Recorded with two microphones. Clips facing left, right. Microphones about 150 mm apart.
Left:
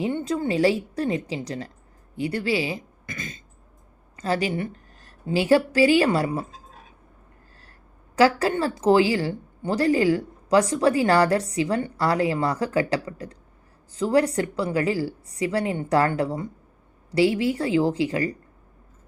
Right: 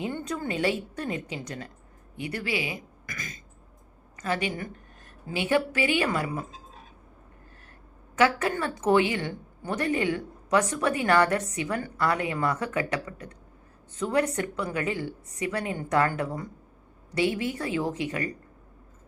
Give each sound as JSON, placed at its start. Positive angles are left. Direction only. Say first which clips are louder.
{"t": 0.0, "sound": "a woman's voice", "louder": "left 6 dB", "side_deg": 25}
{"t": 8.1, "sound": "a woman's voice", "louder": "left 5 dB", "side_deg": 35}